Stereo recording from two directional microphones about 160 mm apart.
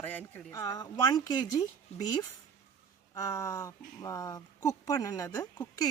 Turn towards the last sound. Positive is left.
turn(degrees=25)  # may be behind; listen again after turning